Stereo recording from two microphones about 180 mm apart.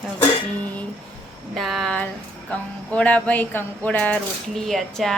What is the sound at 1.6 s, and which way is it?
Speech, centre (ahead or behind).